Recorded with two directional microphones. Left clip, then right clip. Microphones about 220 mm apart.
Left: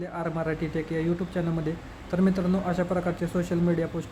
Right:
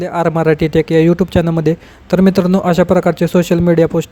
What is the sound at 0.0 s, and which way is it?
Speech, 45° right (ahead or behind).